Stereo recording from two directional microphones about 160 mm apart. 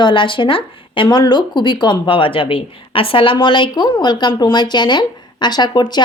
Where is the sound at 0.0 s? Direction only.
30° left (ahead or behind).